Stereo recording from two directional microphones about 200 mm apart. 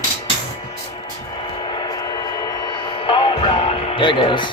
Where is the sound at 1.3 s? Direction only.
20° left (ahead or behind).